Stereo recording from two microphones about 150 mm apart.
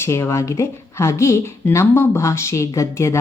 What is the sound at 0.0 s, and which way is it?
A woman's voice, 20° left (ahead or behind).